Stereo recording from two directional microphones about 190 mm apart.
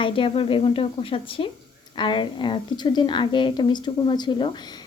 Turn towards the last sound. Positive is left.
turn(degrees=25)  # may be behind; listen again after turning